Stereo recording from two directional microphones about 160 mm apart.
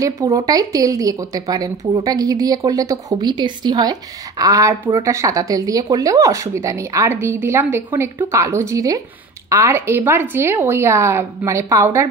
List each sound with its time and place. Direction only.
0.0 s a woman's voice: 20° right (ahead or behind)